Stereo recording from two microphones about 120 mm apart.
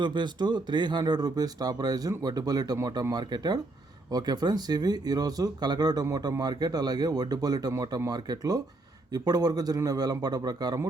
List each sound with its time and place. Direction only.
0.0 s speech: 40° right (ahead or behind)